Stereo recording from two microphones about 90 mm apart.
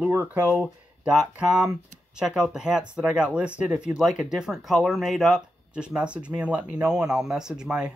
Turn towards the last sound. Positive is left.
turn(degrees=-10)  # may be behind; listen again after turning